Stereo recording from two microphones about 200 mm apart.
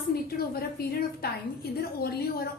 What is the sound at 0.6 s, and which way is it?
A woman's voice, 50° left (ahead or behind).